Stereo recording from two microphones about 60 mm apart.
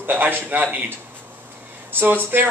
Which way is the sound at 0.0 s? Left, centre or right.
Right.